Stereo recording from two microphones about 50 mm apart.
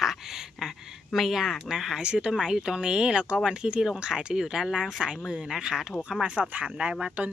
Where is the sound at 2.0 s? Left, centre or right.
Right.